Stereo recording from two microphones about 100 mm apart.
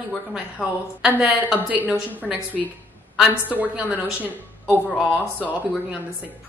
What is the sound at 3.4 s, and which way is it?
Speech, 15° right (ahead or behind).